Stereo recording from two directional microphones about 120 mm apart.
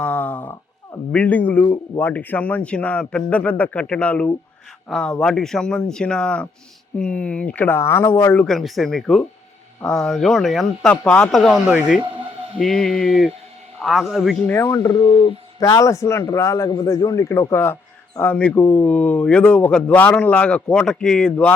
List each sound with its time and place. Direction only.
0.0 s a sound: 10° left (ahead or behind)
1.1 s a man's voice: 10° left (ahead or behind)
8.4 s a man's voice: centre (ahead or behind)
11.6 s speech: 10° right (ahead or behind)
12.6 s speech: 5° left (ahead or behind)
14.4 s speech: 20° left (ahead or behind)
14.8 s speech: 45° left (ahead or behind)
15.6 s a man's voice: 25° left (ahead or behind); by 21.5 s 10° left (ahead or behind)